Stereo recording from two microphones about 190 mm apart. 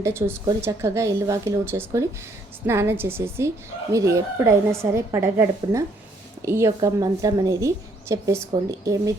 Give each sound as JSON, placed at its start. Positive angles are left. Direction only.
{"t": 0.0, "sound": "speech", "side_deg": -10}